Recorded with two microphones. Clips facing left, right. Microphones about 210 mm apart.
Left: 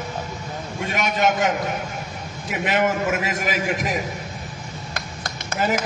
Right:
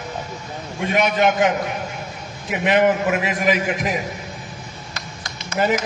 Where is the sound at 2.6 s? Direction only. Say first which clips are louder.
Right 4 dB; 45° left (ahead or behind).